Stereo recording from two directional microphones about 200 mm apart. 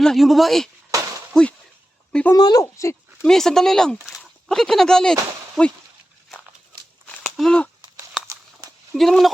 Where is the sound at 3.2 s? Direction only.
Centre (ahead or behind).